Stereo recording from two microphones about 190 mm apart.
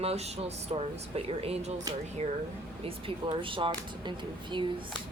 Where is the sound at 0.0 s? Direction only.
35° right (ahead or behind).